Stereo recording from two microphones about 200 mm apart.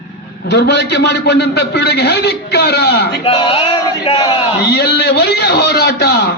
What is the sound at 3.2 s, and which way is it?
Male singing, 25° left (ahead or behind).